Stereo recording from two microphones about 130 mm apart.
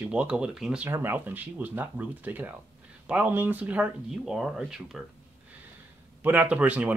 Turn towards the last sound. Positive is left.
turn(degrees=-10)  # may be behind; listen again after turning